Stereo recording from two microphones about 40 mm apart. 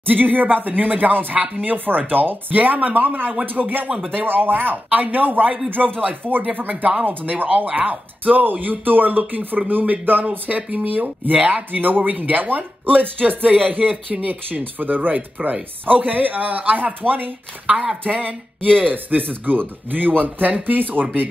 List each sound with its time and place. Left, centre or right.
0.0 s speech: right
5.8 s speech: right
6.5 s speech: right
11.4 s speech: right
11.8 s speech: right